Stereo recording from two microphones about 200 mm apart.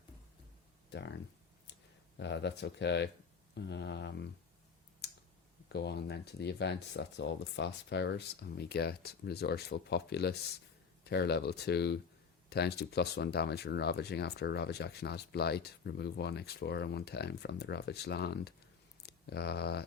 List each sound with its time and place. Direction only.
0.9 s a sound: 60° left (ahead or behind)
2.1 s speech: 60° left (ahead or behind)
5.6 s speech: 55° left (ahead or behind)